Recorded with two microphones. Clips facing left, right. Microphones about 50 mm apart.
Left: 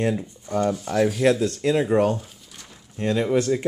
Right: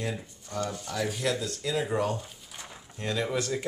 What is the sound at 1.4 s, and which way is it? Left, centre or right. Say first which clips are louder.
Speech: left 9 dB; left.